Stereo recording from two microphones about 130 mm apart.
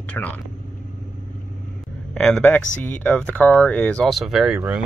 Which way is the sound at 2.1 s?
5° left (ahead or behind).